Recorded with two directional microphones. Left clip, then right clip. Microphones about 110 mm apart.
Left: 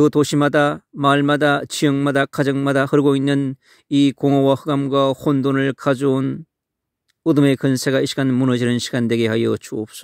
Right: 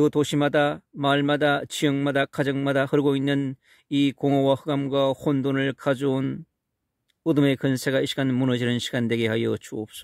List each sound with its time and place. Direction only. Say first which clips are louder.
0.0 s speech: left 6 dB; 45° left (ahead or behind)